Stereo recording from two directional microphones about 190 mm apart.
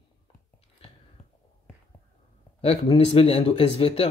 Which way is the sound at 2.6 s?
30° left (ahead or behind).